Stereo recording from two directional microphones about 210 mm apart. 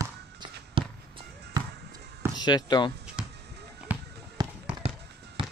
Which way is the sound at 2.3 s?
20° left (ahead or behind).